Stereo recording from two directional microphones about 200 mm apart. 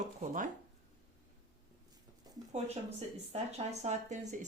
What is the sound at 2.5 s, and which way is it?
Speech, 30° right (ahead or behind).